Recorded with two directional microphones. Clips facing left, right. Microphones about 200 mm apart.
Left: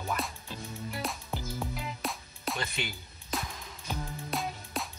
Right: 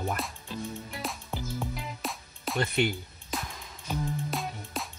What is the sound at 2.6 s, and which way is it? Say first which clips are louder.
Speech: right 9 dB; 60° right (ahead or behind).